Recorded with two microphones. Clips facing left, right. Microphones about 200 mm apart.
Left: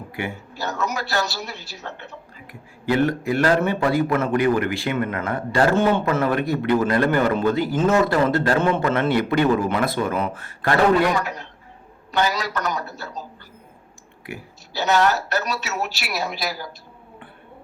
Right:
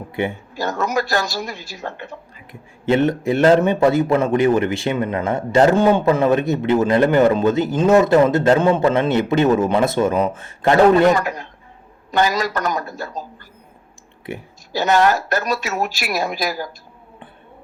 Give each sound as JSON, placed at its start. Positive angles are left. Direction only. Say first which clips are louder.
{"t": 0.2, "sound": "speech", "louder": "right 7 dB", "side_deg": -15}
{"t": 0.6, "sound": "speech", "louder": "right 5 dB", "side_deg": -50}
{"t": 2.5, "sound": "speech", "louder": "right 4 dB", "side_deg": -20}
{"t": 11.1, "sound": "speech", "louder": "right 5 dB", "side_deg": -50}
{"t": 14.7, "sound": "speech", "louder": "right 3 dB", "side_deg": -50}